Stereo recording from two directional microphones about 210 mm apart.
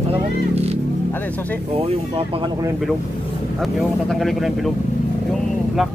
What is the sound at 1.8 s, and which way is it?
Speech, 25° right (ahead or behind).